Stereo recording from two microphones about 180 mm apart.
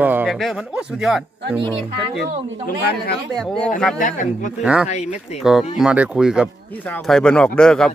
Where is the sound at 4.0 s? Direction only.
45° left (ahead or behind).